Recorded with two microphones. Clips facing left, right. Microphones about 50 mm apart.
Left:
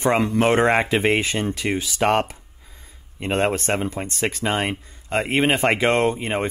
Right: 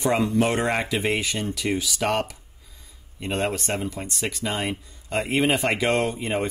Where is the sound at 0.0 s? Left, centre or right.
Left.